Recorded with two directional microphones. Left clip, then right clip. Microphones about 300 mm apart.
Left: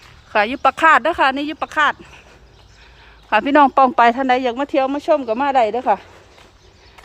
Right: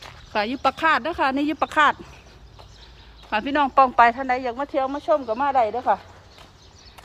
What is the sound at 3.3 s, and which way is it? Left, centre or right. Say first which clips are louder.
Speech: left 9 dB; centre.